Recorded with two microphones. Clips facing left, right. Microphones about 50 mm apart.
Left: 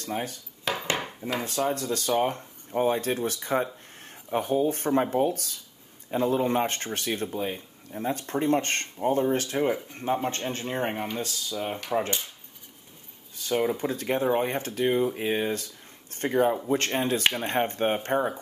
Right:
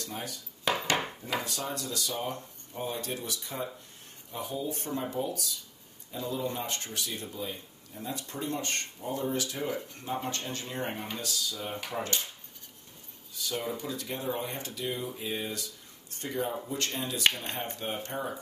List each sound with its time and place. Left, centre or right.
0.0 s speech: left
0.7 s dishes: centre
1.4 s speech: left
9.7 s speech: left
13.4 s speech: left
16.1 s a sound: left
16.6 s speech: left